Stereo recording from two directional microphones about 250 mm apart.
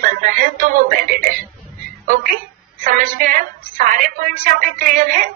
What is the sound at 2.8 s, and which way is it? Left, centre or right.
A woman's voice, right.